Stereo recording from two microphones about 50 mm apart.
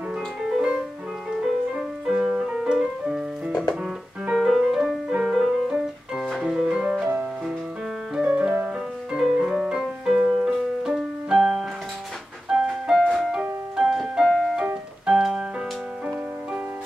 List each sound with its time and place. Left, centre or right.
0.5 s music: centre
4.3 s music: centre
8.2 s music: right
9.2 s music: centre
12.9 s music: centre
13.3 s music: centre